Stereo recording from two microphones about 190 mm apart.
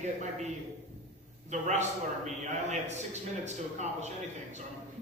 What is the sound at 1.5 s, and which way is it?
A man's voice, 40° right (ahead or behind).